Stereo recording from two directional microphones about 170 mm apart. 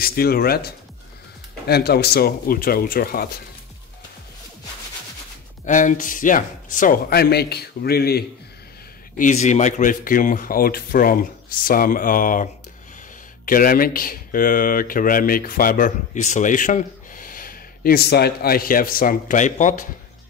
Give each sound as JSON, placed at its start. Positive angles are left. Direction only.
{"t": 0.0, "sound": "speech", "side_deg": 65}
{"t": 5.7, "sound": "speech", "side_deg": 50}
{"t": 9.1, "sound": "speech", "side_deg": 45}
{"t": 13.5, "sound": "speech", "side_deg": 55}